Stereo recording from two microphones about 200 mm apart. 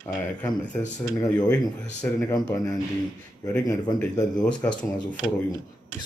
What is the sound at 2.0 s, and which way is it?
Speech, 5° left (ahead or behind).